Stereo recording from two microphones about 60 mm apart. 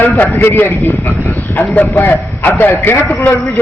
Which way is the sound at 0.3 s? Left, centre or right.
Left.